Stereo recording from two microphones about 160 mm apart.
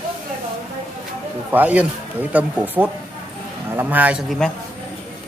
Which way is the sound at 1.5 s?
10° right (ahead or behind).